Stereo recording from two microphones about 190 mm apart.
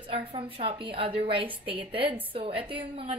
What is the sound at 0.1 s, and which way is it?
A woman's voice, 30° right (ahead or behind).